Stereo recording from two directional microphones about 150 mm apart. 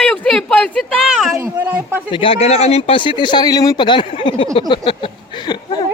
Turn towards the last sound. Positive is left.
turn(degrees=30)  # may be behind; listen again after turning